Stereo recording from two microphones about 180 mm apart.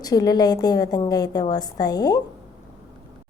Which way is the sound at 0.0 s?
20° left (ahead or behind).